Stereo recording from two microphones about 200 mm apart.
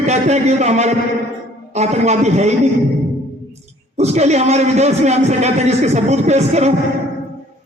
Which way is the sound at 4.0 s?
35° right (ahead or behind).